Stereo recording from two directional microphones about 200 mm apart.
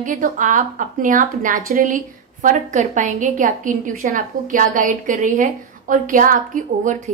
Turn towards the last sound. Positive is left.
turn(degrees=-40)  # may be behind; listen again after turning